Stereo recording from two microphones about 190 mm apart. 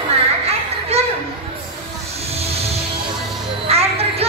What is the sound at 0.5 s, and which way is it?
Children playing, 35° right (ahead or behind).